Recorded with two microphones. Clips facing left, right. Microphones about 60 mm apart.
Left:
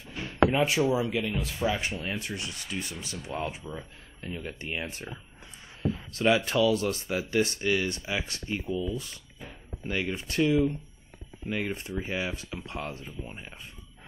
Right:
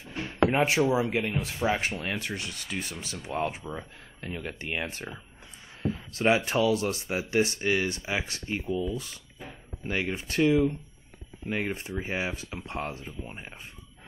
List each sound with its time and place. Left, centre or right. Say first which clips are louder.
0.5 s speech: right 1 dB; right
1.0 s speech: right 1 dB; right
1.7 s sanding: right 2 dB; right
2.7 s speech: right 1 dB; right
4.2 s sanding: right 1 dB; right
5.8 s speech: even; right
8.6 s speech: right 2 dB; right
9.8 s speech: right 1 dB; right
12.0 s speech: right 1 dB; right